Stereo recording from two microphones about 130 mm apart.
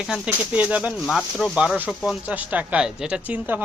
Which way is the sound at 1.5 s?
5° right (ahead or behind).